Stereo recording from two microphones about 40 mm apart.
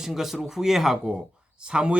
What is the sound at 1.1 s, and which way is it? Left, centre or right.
Speech, right.